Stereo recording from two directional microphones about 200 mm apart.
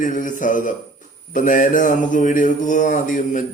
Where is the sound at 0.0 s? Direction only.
40° left (ahead or behind).